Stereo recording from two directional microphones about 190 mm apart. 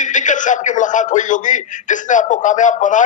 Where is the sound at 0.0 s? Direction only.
40° left (ahead or behind).